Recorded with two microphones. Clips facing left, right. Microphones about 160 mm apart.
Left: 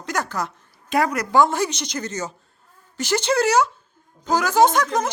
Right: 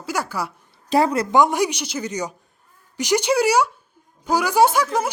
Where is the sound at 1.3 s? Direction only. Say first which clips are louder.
Left 2 dB; 15° right (ahead or behind).